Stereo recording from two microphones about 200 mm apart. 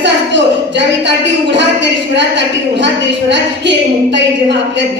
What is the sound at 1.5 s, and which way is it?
A woman's voice, 60° right (ahead or behind).